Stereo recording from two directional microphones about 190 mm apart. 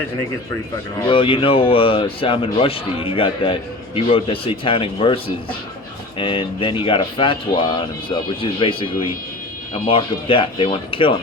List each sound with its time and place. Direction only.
1.0 s speech: 25° left (ahead or behind)